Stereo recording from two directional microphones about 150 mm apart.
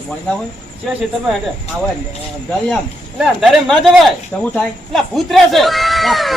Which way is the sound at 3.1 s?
5° right (ahead or behind).